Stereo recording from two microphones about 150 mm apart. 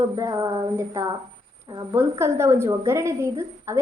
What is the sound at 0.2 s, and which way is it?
A woman's voice, 25° right (ahead or behind).